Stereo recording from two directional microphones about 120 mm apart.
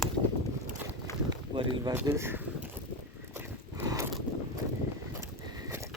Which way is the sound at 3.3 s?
20° right (ahead or behind).